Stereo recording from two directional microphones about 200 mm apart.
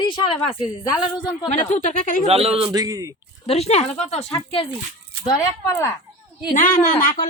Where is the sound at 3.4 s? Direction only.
30° left (ahead or behind).